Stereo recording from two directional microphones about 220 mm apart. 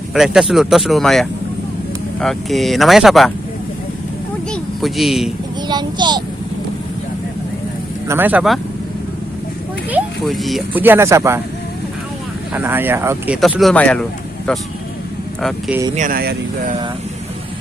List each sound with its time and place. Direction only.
0.1 s speech: centre (ahead or behind)
4.5 s speech: centre (ahead or behind)
5.6 s a child's voice: 20° right (ahead or behind)
8.0 s speech: 10° right (ahead or behind)
9.9 s speech: centre (ahead or behind)
12.5 s speech: 10° right (ahead or behind)
16.0 s speech: 40° right (ahead or behind)